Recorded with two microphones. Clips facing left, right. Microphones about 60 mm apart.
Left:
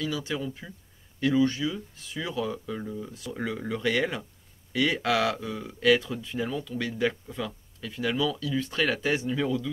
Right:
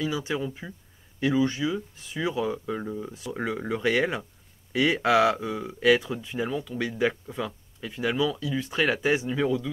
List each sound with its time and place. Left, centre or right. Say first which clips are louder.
0.0 s speech: right 2 dB; right